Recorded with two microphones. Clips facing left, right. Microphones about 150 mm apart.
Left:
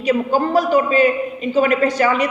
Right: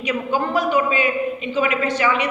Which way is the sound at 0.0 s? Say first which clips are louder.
Left 5 dB; 35° left (ahead or behind).